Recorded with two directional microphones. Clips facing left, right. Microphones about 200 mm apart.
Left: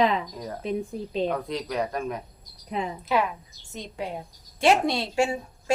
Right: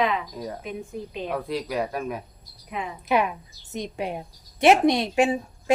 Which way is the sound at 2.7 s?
35° left (ahead or behind).